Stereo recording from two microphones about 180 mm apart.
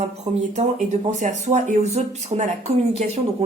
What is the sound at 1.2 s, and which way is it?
Speech, 45° right (ahead or behind).